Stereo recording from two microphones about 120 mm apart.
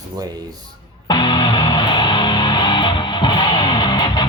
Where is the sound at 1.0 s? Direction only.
40° left (ahead or behind).